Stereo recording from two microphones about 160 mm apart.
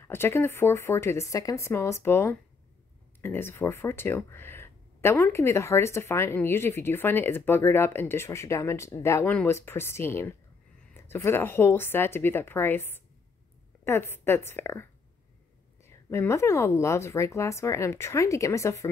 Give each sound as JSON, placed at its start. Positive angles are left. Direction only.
{"t": 0.0, "sound": "speech", "side_deg": 15}